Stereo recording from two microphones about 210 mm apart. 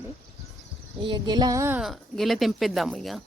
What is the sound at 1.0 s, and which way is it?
Speech, 20° right (ahead or behind).